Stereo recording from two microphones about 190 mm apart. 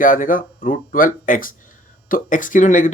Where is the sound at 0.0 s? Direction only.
45° left (ahead or behind).